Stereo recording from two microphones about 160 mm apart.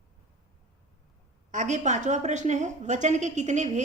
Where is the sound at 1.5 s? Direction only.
50° right (ahead or behind).